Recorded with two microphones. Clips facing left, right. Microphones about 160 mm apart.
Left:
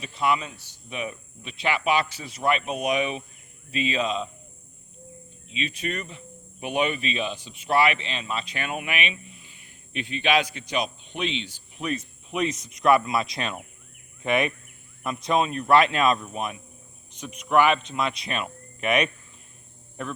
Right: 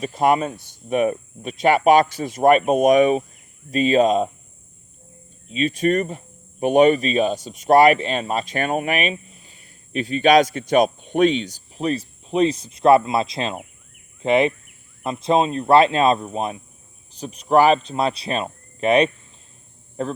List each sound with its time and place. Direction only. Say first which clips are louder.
0.0 s speech: right 7 dB; 45° right (ahead or behind)
5.5 s speech: right 11 dB; 45° right (ahead or behind)